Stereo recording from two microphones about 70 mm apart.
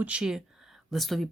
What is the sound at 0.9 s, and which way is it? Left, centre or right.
Speech, centre.